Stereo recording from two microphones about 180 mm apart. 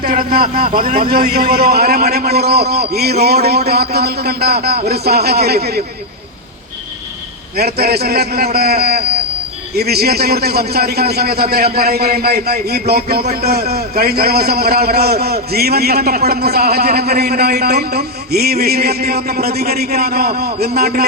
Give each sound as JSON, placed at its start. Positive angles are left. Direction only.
{"t": 0.0, "sound": "a man's voice", "side_deg": -50}
{"t": 7.5, "sound": "a man's voice", "side_deg": -60}